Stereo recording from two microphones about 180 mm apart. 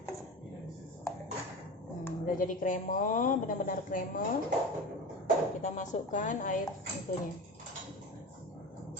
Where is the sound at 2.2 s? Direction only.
50° left (ahead or behind).